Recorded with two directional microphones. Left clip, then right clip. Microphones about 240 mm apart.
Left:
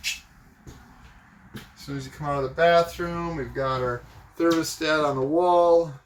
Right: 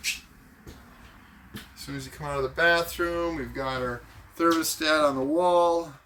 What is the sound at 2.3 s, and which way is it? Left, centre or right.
Speech, right.